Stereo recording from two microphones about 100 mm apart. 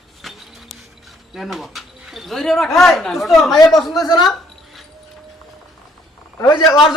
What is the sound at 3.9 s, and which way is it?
Speech, 40° left (ahead or behind).